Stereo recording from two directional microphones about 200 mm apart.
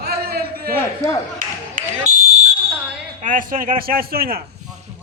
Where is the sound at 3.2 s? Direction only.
45° right (ahead or behind).